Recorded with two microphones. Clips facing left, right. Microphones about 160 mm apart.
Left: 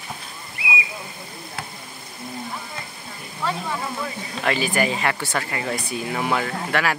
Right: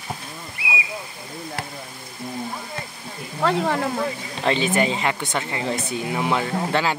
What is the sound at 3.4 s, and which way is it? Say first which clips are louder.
Speech: right 6 dB; 70° right (ahead or behind).